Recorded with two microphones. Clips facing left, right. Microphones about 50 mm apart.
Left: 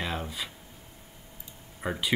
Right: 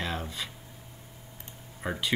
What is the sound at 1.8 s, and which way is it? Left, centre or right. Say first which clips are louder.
Speech: left 1 dB; centre.